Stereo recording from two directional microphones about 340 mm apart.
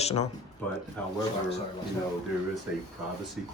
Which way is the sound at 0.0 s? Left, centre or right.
Centre.